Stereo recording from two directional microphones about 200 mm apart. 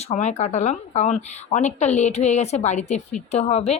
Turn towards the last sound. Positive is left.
turn(degrees=30)  # may be behind; listen again after turning